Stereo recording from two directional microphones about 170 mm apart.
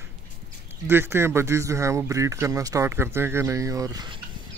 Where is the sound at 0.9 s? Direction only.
15° right (ahead or behind).